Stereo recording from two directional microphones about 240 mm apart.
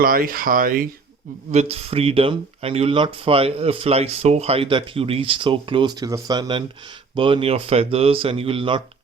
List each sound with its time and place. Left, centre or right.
0.0 s speech: right